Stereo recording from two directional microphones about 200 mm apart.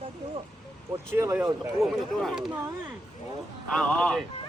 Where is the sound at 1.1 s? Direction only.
15° right (ahead or behind).